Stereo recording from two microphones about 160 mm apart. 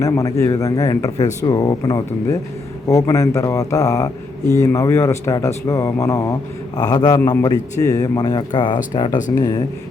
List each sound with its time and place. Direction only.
0.0 s speech: 20° left (ahead or behind)